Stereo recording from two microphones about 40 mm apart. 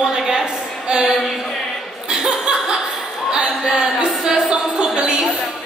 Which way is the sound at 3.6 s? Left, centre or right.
Centre.